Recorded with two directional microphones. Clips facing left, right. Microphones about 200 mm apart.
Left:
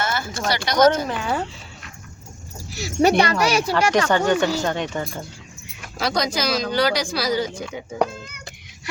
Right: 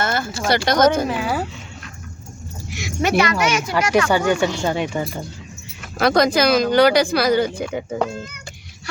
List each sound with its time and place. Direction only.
0.0 s a sound: 50° right (ahead or behind)
0.4 s a woman's voice: 50° right (ahead or behind)
1.0 s speech: 5° right (ahead or behind)
2.6 s speech: 35° left (ahead or behind)
4.1 s speech: 10° right (ahead or behind)
6.0 s speech: 55° right (ahead or behind)